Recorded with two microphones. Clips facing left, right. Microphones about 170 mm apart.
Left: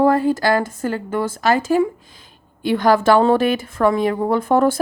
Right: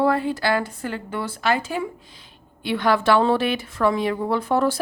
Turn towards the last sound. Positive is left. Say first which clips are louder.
# left 5 dB
turn(degrees=50)  # may be behind; listen again after turning